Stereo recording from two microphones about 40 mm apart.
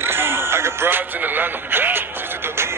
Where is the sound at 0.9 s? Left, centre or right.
Right.